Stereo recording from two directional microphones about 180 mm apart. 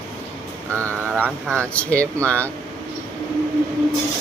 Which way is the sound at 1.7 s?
5° left (ahead or behind).